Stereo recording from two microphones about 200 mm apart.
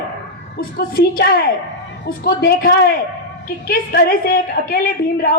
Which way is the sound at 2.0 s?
50° left (ahead or behind).